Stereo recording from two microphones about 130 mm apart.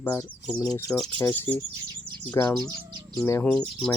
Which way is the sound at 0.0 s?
20° left (ahead or behind).